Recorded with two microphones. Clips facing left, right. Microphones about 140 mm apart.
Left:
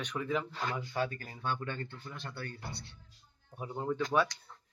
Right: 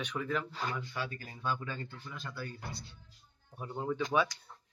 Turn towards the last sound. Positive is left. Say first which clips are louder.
# left 1 dB
turn(degrees=0)  # may be behind; listen again after turning